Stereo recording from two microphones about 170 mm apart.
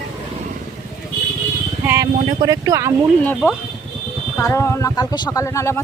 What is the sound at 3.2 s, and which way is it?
Speech, 10° left (ahead or behind).